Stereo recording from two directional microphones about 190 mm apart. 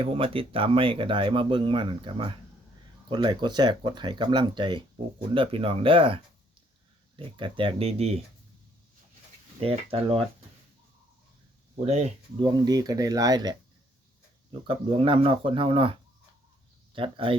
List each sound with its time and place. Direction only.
0.0 s speech: 30° right (ahead or behind)
7.3 s speech: 25° right (ahead or behind)
9.6 s speech: 30° right (ahead or behind)
12.4 s speech: 20° right (ahead or behind)
14.7 s speech: 30° right (ahead or behind)